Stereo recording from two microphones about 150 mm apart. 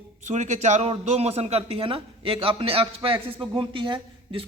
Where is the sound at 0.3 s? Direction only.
50° right (ahead or behind).